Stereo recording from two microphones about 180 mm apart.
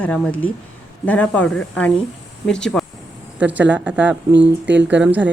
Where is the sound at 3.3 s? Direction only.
10° right (ahead or behind).